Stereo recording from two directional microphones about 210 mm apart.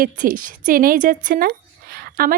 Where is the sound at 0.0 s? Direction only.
40° right (ahead or behind).